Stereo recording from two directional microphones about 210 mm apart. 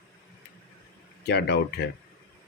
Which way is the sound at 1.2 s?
50° left (ahead or behind).